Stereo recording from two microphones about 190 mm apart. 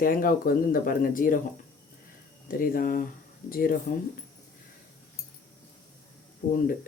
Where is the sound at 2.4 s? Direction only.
45° left (ahead or behind).